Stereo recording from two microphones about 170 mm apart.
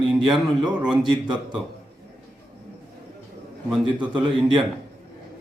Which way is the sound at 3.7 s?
5° right (ahead or behind).